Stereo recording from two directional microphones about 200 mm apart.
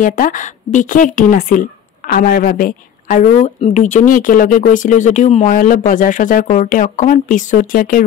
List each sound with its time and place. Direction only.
0.0 s a woman's voice: 40° left (ahead or behind)